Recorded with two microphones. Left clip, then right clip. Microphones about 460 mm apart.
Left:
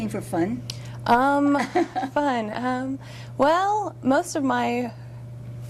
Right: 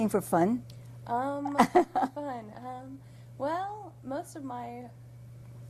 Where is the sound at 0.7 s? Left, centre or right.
Left.